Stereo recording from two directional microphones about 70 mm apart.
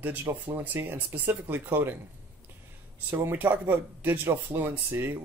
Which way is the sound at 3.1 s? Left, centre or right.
Right.